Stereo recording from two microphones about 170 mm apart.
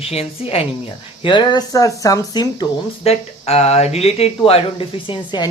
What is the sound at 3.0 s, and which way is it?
Speech, 35° left (ahead or behind).